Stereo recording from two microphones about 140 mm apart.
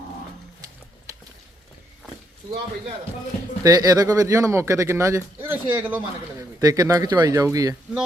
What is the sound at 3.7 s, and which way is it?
Speech, 25° right (ahead or behind).